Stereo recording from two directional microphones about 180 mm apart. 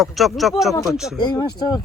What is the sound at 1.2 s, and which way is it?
Speech, 25° left (ahead or behind).